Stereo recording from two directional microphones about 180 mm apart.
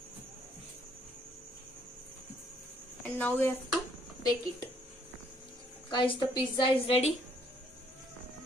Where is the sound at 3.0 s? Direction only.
10° left (ahead or behind).